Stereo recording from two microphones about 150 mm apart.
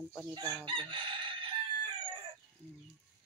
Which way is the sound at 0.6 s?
35° right (ahead or behind).